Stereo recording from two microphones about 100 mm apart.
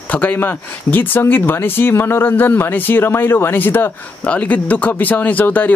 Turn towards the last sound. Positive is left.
turn(degrees=20)  # may be behind; listen again after turning